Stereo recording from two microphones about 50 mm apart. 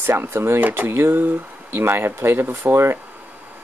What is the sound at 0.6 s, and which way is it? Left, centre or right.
Speech, right.